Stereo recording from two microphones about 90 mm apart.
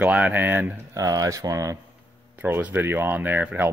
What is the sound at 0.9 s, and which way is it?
Speech, 40° right (ahead or behind).